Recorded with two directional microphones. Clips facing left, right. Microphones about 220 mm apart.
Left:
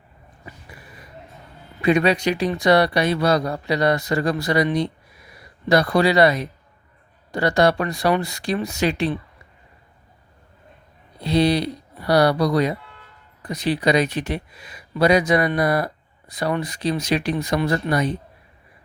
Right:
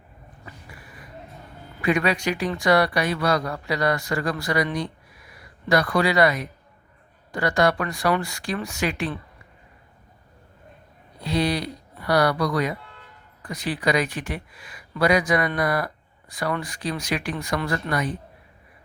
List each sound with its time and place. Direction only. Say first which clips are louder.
1.8 s speech: left 5 dB; 25° left (ahead or behind)
11.2 s speech: left 5 dB; 25° left (ahead or behind)